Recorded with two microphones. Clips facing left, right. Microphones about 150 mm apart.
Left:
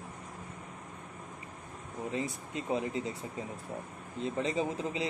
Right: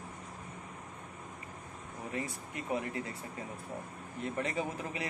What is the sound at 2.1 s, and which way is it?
Speech, 20° left (ahead or behind).